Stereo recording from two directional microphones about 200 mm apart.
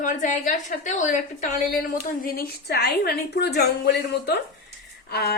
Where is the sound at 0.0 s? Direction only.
40° left (ahead or behind).